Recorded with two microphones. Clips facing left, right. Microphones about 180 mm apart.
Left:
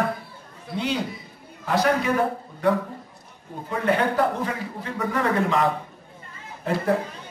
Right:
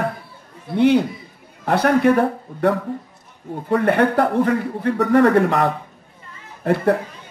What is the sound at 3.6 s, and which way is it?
A man's voice, 60° right (ahead or behind).